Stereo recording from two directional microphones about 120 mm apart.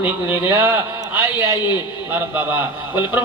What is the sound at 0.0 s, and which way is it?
Speech, 15° right (ahead or behind).